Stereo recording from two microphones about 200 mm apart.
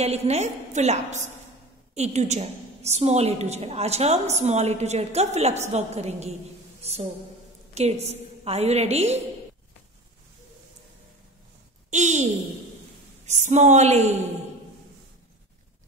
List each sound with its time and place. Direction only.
0.0 s a woman's voice: 30° right (ahead or behind)
11.9 s a sound: 35° right (ahead or behind)
13.3 s a woman's voice: 35° right (ahead or behind)